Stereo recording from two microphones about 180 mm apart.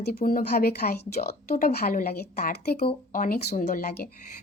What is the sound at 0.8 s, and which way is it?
A woman's voice, 45° left (ahead or behind).